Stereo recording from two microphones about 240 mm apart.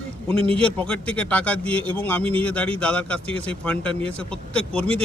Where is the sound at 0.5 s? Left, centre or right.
Centre.